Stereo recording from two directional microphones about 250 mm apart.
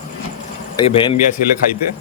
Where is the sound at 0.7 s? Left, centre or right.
Left.